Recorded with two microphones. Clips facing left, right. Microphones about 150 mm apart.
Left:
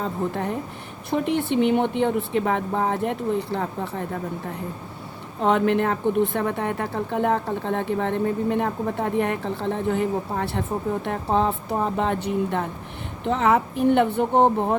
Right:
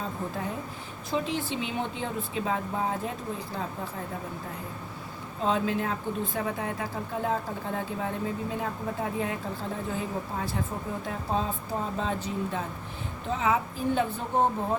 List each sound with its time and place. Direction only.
0.0 s a woman's voice: 70° left (ahead or behind)
5.4 s a woman's voice: 65° left (ahead or behind)